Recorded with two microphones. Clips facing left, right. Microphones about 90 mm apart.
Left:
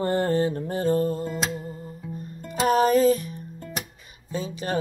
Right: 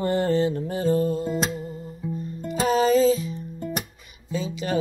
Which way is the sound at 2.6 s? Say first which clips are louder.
Even; 55° left (ahead or behind).